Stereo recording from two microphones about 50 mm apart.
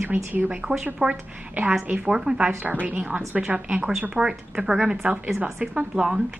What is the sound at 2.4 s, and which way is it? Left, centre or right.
Speech, right.